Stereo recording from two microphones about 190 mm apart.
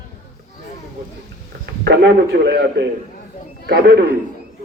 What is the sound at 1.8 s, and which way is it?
A man's voice, 65° right (ahead or behind).